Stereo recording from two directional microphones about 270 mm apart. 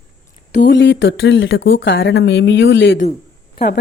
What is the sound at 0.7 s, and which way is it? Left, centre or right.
Speech, left.